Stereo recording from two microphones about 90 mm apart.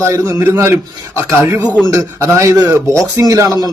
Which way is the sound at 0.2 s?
30° right (ahead or behind).